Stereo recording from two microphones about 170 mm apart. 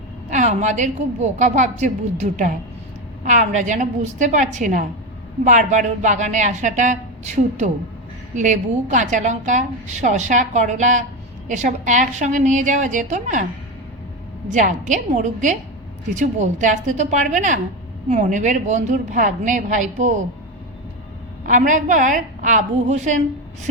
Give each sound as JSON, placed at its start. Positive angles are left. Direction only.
{"t": 0.3, "sound": "a woman's voice", "side_deg": -45}
{"t": 14.4, "sound": "a woman's voice", "side_deg": -45}
{"t": 21.4, "sound": "a woman's voice", "side_deg": -50}